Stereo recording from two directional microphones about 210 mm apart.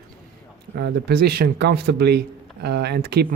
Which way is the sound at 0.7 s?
50° right (ahead or behind).